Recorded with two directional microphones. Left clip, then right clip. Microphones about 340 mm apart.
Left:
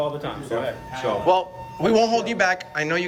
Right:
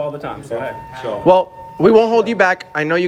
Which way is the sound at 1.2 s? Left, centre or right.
Centre.